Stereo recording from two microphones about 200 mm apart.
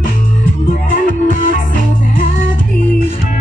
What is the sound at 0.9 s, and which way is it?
Music, 45° left (ahead or behind).